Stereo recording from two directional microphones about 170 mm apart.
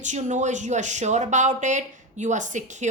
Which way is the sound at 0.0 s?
45° right (ahead or behind).